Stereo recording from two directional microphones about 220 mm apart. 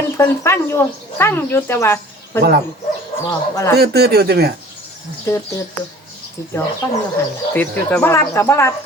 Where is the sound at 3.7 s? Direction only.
45° right (ahead or behind).